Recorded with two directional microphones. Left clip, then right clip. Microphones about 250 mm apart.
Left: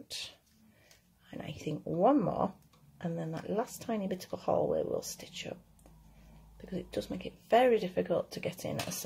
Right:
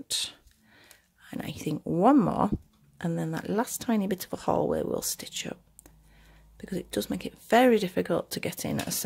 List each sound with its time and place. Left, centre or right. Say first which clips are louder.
1.3 s speech: right 6 dB; right
6.6 s speech: right 6 dB; right